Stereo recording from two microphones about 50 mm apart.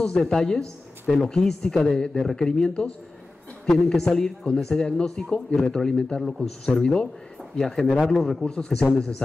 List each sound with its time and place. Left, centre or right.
0.0 s speech: centre
6.2 s speech: centre
6.6 s speech: centre
8.5 s speech: centre